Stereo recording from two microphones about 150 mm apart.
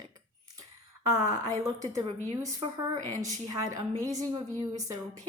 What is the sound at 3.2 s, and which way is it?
Speech, 20° right (ahead or behind).